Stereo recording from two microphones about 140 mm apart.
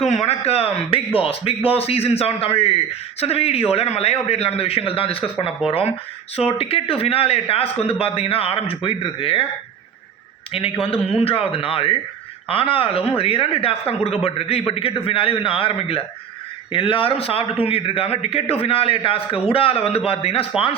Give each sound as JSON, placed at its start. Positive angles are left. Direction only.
{"t": 0.0, "sound": "speech", "side_deg": 50}
{"t": 10.5, "sound": "speech", "side_deg": 45}